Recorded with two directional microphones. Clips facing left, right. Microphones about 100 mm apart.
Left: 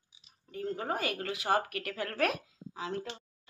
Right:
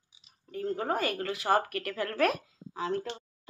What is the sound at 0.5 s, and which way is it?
Speech, 45° right (ahead or behind).